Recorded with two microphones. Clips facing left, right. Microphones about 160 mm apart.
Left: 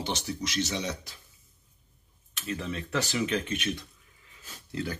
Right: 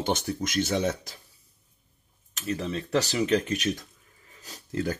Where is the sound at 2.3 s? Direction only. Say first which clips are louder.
Right 4 dB; 40° right (ahead or behind).